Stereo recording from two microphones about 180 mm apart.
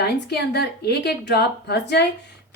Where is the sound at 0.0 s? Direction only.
65° left (ahead or behind).